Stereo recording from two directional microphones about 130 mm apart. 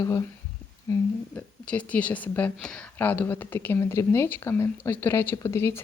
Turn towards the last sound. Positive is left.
turn(degrees=20)  # may be behind; listen again after turning